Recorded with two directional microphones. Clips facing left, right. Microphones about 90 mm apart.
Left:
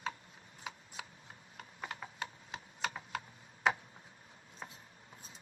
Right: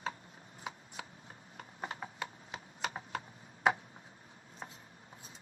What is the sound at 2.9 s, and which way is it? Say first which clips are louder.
Typing: right 1 dB; 35° right (ahead or behind).